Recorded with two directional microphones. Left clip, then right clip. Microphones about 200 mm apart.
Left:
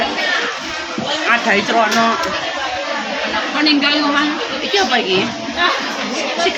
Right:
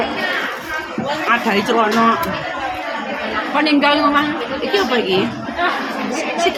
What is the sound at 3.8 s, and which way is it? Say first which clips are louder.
Speech: right 1 dB; 60° right (ahead or behind).